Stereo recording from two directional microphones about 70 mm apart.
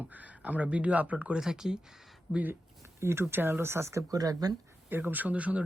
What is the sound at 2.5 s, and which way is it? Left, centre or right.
Speech, right.